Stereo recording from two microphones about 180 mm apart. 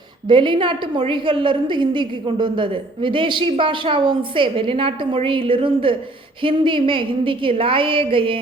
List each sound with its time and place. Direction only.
0.3 s a woman's voice: 25° right (ahead or behind)